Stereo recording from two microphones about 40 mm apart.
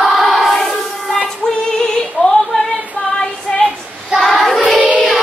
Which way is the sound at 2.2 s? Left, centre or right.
Left.